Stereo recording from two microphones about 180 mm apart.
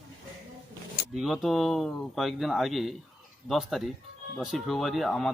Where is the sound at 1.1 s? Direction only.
Centre (ahead or behind).